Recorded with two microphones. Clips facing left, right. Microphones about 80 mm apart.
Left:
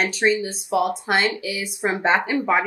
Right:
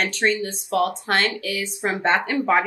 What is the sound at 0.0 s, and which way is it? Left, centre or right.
Speech, centre.